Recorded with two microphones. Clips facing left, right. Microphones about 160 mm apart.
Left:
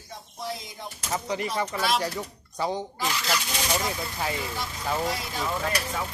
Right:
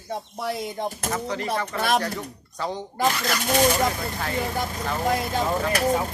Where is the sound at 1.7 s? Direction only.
55° right (ahead or behind).